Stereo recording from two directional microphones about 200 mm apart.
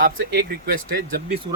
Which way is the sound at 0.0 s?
45° right (ahead or behind).